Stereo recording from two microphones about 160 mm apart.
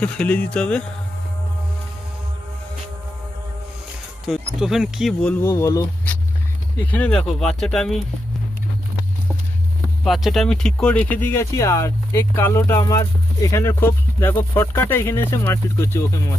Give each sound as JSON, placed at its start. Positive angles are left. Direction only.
{"t": 0.0, "sound": "speech", "side_deg": 10}
{"t": 4.3, "sound": "speech", "side_deg": -5}
{"t": 5.2, "sound": "speech", "side_deg": 10}
{"t": 10.0, "sound": "speech", "side_deg": 0}